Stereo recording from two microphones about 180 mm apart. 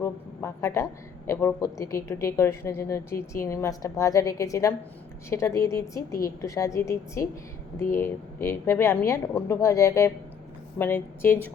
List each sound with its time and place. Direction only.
0.0 s a woman's voice: 15° left (ahead or behind)